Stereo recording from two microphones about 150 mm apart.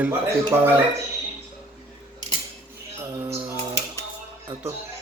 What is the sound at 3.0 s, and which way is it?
Music, 20° right (ahead or behind).